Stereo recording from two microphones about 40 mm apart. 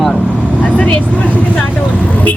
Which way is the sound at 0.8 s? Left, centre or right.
Left.